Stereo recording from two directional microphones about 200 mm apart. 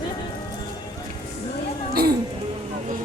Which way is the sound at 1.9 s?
50° right (ahead or behind).